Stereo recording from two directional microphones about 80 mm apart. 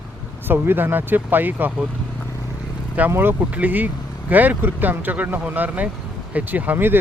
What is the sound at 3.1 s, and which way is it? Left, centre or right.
Speech, right.